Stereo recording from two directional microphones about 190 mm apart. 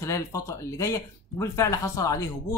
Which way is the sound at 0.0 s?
15° left (ahead or behind).